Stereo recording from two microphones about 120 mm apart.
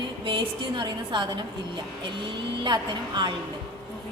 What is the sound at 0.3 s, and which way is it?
A woman's voice, 40° right (ahead or behind).